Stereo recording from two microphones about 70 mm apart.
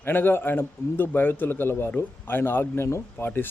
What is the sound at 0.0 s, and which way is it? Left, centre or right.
A man's voice, left.